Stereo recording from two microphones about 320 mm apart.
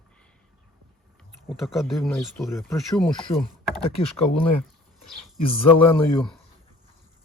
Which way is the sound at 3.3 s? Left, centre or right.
Centre.